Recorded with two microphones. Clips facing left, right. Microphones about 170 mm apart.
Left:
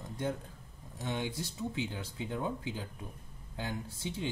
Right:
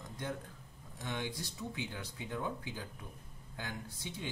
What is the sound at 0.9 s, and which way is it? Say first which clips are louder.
Speech: left 4 dB; 25° left (ahead or behind).